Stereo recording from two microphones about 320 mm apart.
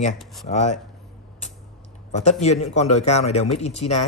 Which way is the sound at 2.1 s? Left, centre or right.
Left.